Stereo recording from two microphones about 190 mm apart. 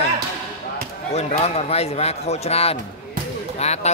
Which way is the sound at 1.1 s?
35° left (ahead or behind).